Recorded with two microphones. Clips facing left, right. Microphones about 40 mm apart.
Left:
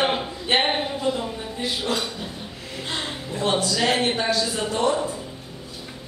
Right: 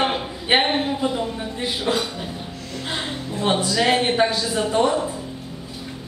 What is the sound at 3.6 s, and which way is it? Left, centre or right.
A man's voice, centre.